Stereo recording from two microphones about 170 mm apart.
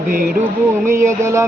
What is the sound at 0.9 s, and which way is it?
Speech, 15° right (ahead or behind).